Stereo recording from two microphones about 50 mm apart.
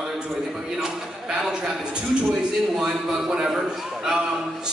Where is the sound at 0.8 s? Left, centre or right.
Centre.